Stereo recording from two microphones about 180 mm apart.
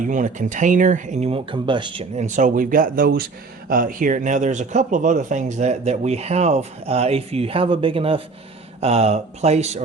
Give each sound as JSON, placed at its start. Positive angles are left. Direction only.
{"t": 0.1, "sound": "speech", "side_deg": -45}